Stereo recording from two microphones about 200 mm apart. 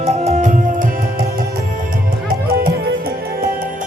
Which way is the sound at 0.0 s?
35° right (ahead or behind).